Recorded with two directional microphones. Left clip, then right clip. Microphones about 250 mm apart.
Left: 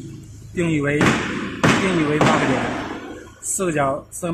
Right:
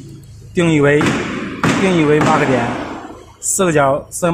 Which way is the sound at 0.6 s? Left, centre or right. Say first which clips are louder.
Right 9 dB; right.